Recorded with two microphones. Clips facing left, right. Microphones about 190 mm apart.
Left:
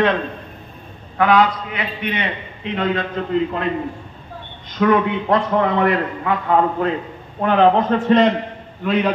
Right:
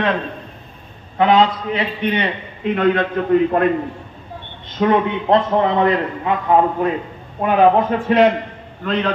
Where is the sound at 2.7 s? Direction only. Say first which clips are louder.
Right 4 dB; 55° right (ahead or behind).